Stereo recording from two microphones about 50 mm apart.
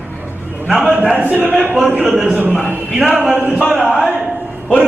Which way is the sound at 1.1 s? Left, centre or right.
Right.